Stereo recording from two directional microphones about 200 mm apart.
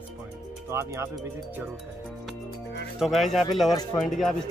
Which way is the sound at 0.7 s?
15° right (ahead or behind).